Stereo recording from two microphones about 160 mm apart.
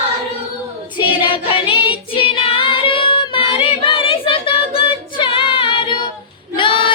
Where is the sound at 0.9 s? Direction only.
35° left (ahead or behind).